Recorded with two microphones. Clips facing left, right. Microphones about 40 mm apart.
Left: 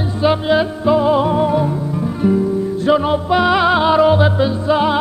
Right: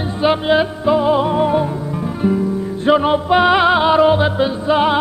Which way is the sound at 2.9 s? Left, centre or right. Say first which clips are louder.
Right 2 dB; centre.